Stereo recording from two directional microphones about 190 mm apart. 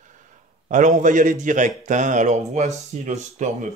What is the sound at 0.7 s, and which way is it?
A man's voice, 40° right (ahead or behind).